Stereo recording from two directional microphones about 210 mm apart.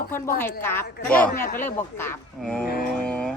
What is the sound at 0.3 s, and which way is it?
A woman's voice, 10° left (ahead or behind).